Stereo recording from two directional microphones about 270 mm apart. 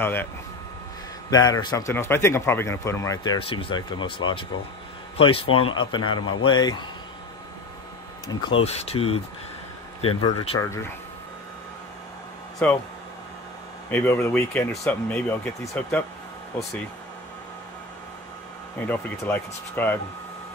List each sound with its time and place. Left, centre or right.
0.0 s speech: centre
1.3 s speech: centre
8.3 s speech: centre
10.4 s speech: centre
12.6 s speech: centre
13.8 s speech: centre
18.9 s speech: centre